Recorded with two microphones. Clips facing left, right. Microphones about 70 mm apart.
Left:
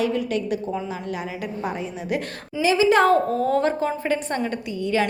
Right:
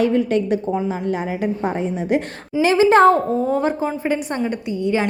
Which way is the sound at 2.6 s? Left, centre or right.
Right.